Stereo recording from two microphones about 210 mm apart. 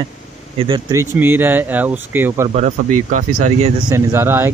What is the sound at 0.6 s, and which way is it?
Speech, 20° right (ahead or behind).